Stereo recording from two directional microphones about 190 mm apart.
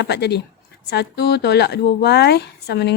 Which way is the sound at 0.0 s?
60° left (ahead or behind).